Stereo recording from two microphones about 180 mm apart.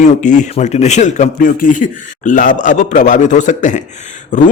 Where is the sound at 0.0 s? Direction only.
45° left (ahead or behind).